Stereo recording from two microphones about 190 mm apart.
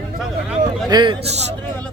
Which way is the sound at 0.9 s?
25° right (ahead or behind).